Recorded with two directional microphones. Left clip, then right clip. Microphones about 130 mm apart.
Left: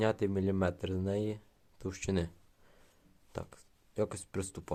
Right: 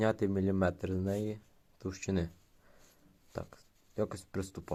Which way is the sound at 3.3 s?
25° left (ahead or behind).